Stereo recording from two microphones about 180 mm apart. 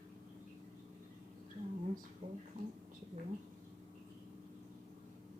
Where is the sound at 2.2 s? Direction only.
35° right (ahead or behind).